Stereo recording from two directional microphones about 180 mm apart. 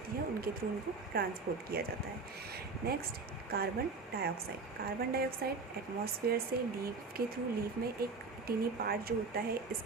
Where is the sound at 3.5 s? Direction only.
60° right (ahead or behind).